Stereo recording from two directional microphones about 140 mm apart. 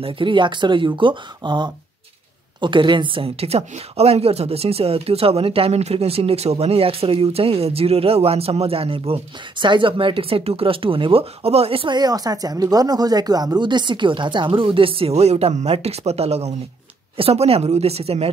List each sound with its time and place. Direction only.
0.0 s speech: 35° right (ahead or behind)